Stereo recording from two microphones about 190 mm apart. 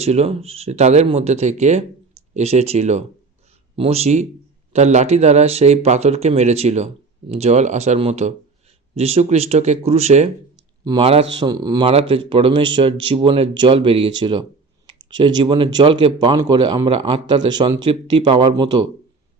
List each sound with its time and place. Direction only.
0.0 s speech: 35° right (ahead or behind)